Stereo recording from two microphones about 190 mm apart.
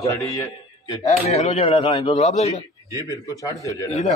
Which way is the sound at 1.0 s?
35° left (ahead or behind).